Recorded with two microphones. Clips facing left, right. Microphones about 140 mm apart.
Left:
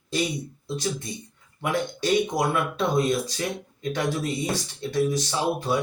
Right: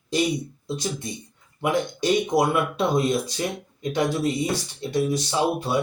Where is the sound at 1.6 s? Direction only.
15° right (ahead or behind).